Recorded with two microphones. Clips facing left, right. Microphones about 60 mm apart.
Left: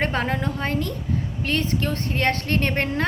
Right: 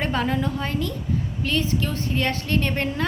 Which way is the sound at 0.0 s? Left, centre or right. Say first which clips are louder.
Even; left.